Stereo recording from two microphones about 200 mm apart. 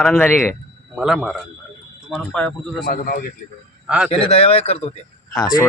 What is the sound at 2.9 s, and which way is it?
Speech, 50° left (ahead or behind).